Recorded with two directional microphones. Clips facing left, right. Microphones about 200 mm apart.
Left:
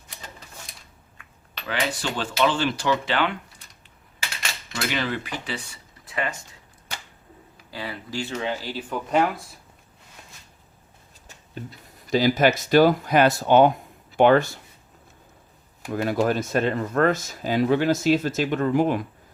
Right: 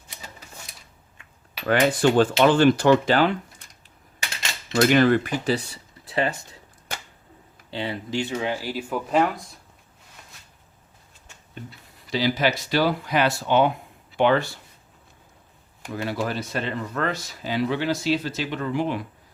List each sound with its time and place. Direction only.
1.6 s speech: 50° right (ahead or behind)
4.7 s speech: 45° right (ahead or behind)
7.7 s speech: 25° right (ahead or behind); by 9.4 s centre (ahead or behind)
11.3 s speech: 40° left (ahead or behind)
15.9 s speech: 45° left (ahead or behind)